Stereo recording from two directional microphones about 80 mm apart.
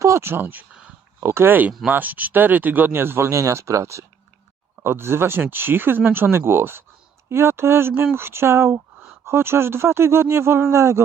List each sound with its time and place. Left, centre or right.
0.0 s speech: right